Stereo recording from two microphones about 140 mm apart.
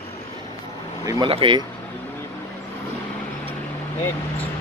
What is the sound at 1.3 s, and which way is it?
Speech, 35° right (ahead or behind).